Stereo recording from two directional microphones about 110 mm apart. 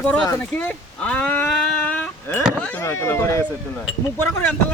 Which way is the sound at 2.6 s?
15° left (ahead or behind).